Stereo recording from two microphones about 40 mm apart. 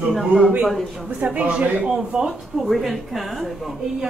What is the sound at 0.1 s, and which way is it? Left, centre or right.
Speech, centre.